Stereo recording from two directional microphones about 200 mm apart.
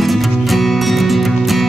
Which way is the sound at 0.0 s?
Centre (ahead or behind).